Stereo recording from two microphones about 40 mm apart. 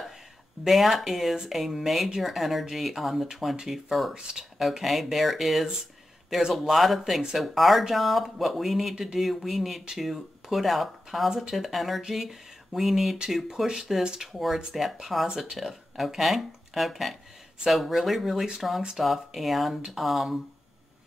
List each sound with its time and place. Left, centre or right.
0.7 s speech: centre
4.1 s speech: centre
4.6 s speech: centre
14.3 s speech: centre
15.2 s speech: centre